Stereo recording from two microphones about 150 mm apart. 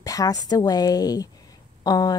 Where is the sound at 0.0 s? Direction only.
25° left (ahead or behind).